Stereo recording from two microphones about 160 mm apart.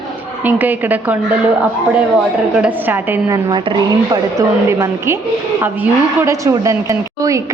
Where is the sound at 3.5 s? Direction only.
25° right (ahead or behind).